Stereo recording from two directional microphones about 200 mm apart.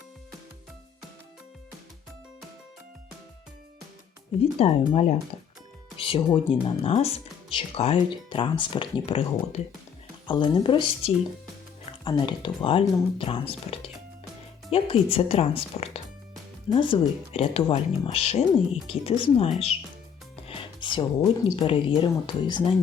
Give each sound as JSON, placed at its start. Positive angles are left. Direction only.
{"t": 4.4, "sound": "speech", "side_deg": 30}
{"t": 6.0, "sound": "speech", "side_deg": 25}
{"t": 20.5, "sound": "music", "side_deg": 25}
{"t": 21.5, "sound": "speech", "side_deg": 25}